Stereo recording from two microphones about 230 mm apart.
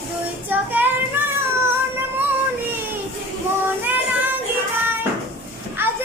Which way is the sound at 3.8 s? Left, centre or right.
Centre.